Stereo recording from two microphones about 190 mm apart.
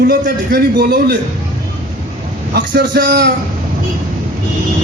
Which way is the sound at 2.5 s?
65° right (ahead or behind).